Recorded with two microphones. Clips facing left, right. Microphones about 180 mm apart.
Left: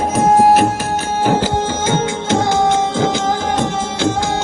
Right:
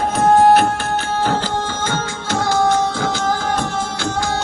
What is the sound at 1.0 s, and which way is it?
Music, 15° left (ahead or behind).